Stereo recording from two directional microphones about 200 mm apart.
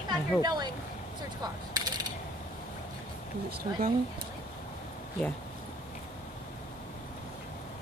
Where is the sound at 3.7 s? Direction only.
30° right (ahead or behind).